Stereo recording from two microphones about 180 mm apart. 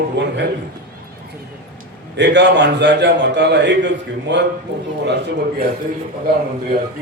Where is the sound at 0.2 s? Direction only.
85° right.